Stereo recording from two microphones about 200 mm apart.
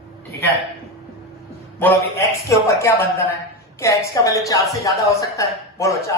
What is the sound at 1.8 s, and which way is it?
A woman's voice, 10° left (ahead or behind).